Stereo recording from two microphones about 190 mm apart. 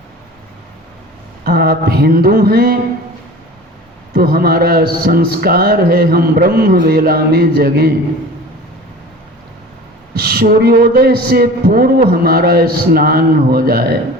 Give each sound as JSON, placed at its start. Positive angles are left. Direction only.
{"t": 1.5, "sound": "speech", "side_deg": -55}
{"t": 4.1, "sound": "speech", "side_deg": -50}
{"t": 10.2, "sound": "speech", "side_deg": -55}